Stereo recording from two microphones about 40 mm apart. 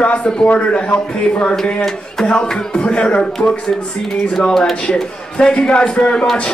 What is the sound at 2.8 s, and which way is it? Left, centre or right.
Speech, left.